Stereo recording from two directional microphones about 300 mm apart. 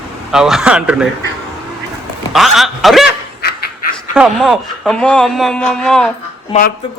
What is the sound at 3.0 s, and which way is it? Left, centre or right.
Dog, left.